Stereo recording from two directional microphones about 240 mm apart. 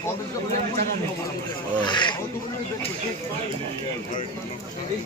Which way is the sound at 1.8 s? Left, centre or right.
Centre.